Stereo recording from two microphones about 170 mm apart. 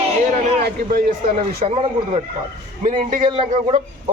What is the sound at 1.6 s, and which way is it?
Speech, 35° right (ahead or behind).